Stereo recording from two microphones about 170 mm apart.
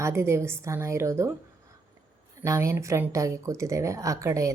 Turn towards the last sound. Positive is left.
turn(degrees=-20)  # may be behind; listen again after turning